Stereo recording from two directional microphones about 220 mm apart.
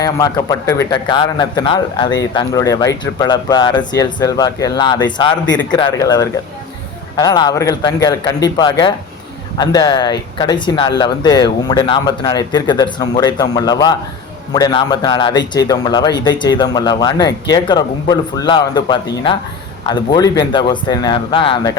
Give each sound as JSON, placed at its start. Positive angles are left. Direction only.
{"t": 0.0, "sound": "a man's voice", "side_deg": 15}